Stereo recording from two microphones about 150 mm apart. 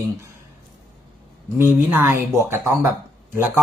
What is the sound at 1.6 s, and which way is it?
Speech, 15° right (ahead or behind).